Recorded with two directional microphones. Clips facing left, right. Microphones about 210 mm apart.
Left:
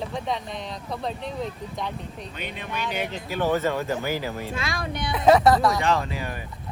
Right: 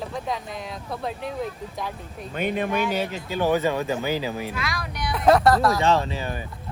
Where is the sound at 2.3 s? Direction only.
50° right (ahead or behind).